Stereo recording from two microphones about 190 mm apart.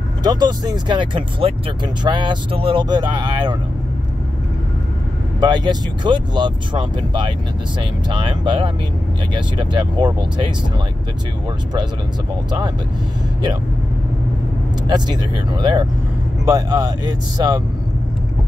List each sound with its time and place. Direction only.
0.2 s speech: 20° right (ahead or behind)
5.4 s speech: 20° right (ahead or behind)
12.4 s speech: 20° right (ahead or behind)
14.9 s speech: 25° right (ahead or behind)